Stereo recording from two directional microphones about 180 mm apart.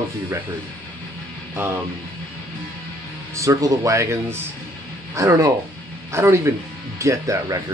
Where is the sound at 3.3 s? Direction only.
15° right (ahead or behind).